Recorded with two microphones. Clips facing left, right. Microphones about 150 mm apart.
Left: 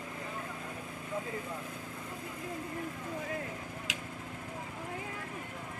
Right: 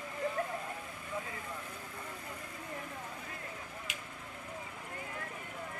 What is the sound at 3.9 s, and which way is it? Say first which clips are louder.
Chop: left 4 dB; 90° left.